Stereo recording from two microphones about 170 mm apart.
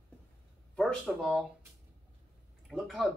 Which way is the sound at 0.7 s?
Centre (ahead or behind).